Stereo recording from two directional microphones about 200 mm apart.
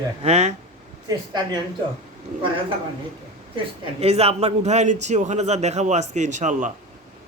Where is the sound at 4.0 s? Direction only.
30° right (ahead or behind).